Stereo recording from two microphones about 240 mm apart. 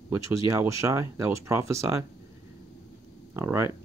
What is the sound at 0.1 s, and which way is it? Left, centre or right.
Speech, centre.